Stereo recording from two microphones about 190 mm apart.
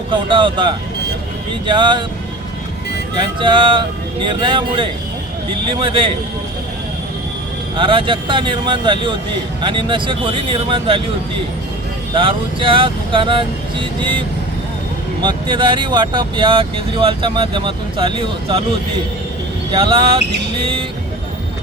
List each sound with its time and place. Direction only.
0.1 s speech: 25° right (ahead or behind)
3.2 s speech: 25° right (ahead or behind)
7.8 s speech: 25° right (ahead or behind)
12.1 s speech: 30° right (ahead or behind)
15.2 s speech: 25° right (ahead or behind)
19.7 s speech: 25° right (ahead or behind)